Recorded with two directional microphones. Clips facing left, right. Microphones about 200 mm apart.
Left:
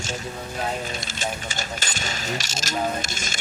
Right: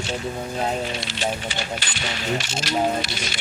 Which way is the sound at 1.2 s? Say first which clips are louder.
Right 4 dB; 45° left (ahead or behind).